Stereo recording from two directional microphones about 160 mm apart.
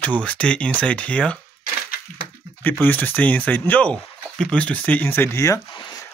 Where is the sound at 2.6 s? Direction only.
10° left (ahead or behind).